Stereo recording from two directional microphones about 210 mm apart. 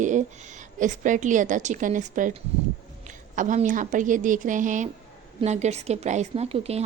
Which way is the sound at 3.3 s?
35° right (ahead or behind).